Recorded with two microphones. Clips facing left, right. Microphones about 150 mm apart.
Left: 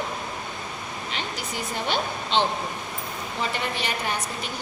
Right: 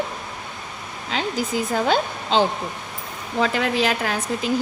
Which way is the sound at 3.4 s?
90° right.